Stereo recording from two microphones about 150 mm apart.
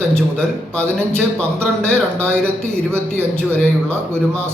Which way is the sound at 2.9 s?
15° right (ahead or behind).